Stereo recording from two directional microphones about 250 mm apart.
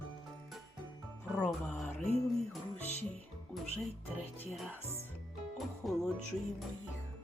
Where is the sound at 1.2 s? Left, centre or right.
Centre.